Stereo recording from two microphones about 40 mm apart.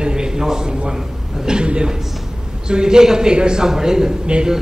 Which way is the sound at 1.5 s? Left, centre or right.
Right.